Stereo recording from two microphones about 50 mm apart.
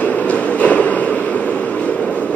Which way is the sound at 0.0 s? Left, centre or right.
Left.